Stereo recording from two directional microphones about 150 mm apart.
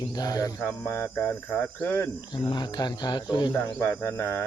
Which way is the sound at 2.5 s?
30° left (ahead or behind).